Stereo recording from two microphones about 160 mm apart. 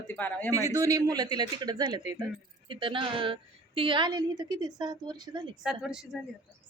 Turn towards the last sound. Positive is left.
turn(degrees=-5)  # may be behind; listen again after turning